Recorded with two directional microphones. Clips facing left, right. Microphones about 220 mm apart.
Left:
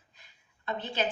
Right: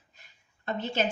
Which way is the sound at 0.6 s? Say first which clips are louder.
Right 3 dB; 45° right (ahead or behind).